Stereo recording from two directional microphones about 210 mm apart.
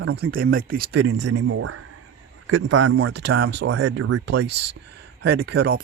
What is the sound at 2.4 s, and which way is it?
Speech, 65° right (ahead or behind).